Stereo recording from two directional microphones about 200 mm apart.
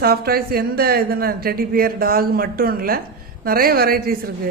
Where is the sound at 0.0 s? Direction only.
50° right (ahead or behind).